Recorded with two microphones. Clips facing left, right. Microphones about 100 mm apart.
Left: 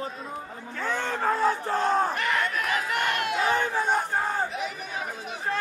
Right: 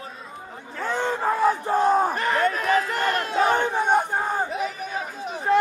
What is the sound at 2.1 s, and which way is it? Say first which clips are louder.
Crowd: right 4 dB; 35° right (ahead or behind).